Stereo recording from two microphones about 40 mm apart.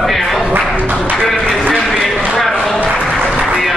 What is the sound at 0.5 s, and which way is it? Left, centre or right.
Music, right.